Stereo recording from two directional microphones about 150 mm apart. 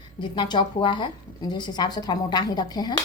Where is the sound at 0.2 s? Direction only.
30° left (ahead or behind).